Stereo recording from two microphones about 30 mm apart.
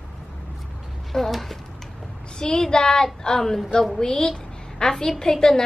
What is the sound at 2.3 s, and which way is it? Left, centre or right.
Child singing, left.